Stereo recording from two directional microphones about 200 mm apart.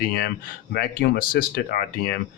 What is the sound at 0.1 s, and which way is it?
Speech, 50° left (ahead or behind).